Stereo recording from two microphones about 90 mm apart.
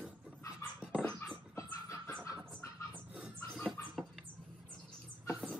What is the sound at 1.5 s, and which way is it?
Chicken, 35° left (ahead or behind).